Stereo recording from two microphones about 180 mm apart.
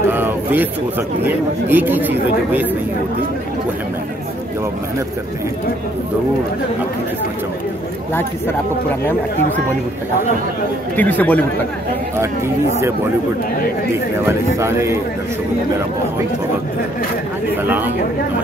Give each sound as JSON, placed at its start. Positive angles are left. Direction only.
{"t": 0.1, "sound": "a sound", "side_deg": -10}
{"t": 1.2, "sound": "speech", "side_deg": -10}
{"t": 11.0, "sound": "speech", "side_deg": 10}
{"t": 14.2, "sound": "speech", "side_deg": -15}
{"t": 17.6, "sound": "speech", "side_deg": -10}